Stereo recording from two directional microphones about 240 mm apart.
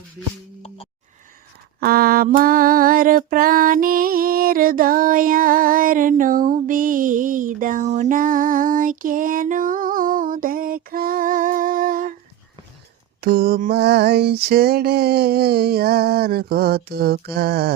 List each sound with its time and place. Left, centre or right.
1.8 s female singing: right
13.2 s music: right